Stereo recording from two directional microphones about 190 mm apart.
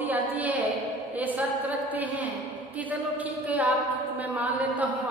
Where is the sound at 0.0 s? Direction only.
10° right (ahead or behind).